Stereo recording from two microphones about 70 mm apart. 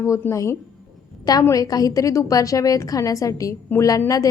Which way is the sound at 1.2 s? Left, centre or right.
Left.